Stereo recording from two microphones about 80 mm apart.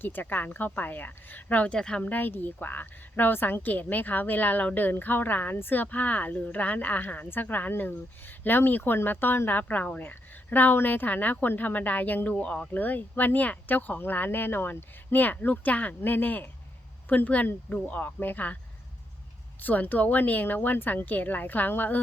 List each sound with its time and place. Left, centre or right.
0.0 s a woman's voice: left
19.5 s a woman's voice: left